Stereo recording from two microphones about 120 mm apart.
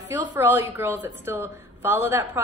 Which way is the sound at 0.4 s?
20° right (ahead or behind).